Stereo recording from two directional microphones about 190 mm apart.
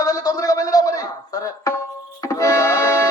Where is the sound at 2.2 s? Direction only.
15° left (ahead or behind).